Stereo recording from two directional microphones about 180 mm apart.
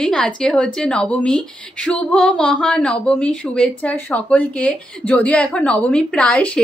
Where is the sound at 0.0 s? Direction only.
5° left (ahead or behind).